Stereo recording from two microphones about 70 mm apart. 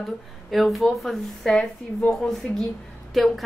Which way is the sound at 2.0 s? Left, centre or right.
Centre.